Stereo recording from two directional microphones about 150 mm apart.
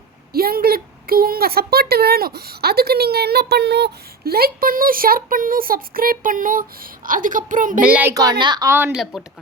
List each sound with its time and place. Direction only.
0.3 s a woman's voice: 85° right; by 7.8 s 60° right (ahead or behind)
7.8 s a child's voice: 10° right (ahead or behind)
8.1 s speech: 25° right (ahead or behind)
8.7 s a child's voice: 15° right (ahead or behind)